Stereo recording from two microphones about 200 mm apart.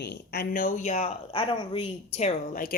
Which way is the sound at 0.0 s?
55° left (ahead or behind).